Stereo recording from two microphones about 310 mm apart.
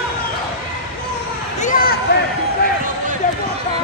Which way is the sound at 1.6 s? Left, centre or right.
Left.